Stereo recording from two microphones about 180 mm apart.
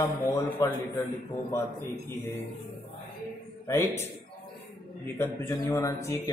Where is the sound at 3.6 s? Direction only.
15° left (ahead or behind).